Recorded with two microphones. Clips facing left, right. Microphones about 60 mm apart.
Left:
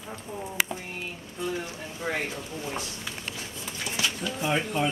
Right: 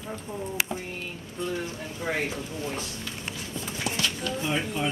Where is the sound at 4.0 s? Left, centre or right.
Centre.